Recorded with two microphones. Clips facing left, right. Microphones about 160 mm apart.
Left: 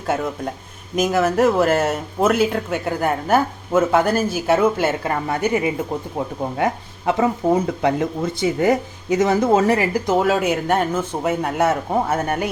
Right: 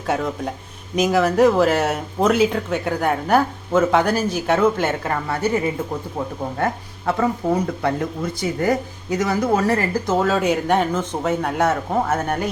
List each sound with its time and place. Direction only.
0.1 s speech: centre (ahead or behind)